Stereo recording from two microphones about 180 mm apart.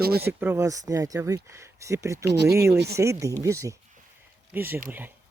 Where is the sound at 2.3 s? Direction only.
70° right (ahead or behind).